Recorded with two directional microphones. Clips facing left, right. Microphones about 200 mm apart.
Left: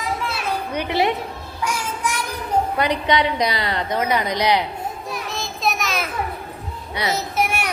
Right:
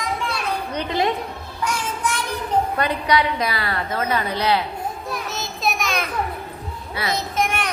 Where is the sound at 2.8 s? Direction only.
20° left (ahead or behind).